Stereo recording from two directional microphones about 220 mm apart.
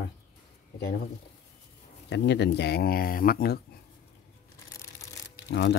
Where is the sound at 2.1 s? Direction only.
50° left (ahead or behind).